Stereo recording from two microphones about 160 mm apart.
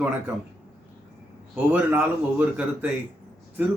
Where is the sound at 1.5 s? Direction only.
10° right (ahead or behind).